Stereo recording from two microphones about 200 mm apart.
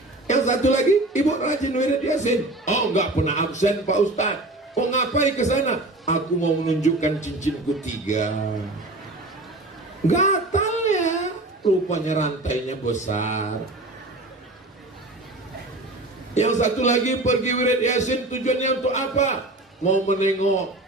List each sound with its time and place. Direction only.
0.3 s a man's voice: 35° left (ahead or behind)
10.1 s child singing: 35° left (ahead or behind)
11.9 s a man's voice: 35° left (ahead or behind)
16.3 s a man's voice: 35° left (ahead or behind)